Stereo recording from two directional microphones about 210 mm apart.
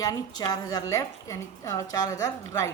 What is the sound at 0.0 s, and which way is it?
A woman's voice, 15° left (ahead or behind).